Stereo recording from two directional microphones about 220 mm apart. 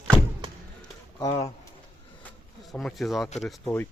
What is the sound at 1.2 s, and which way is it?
Speech, 15° left (ahead or behind).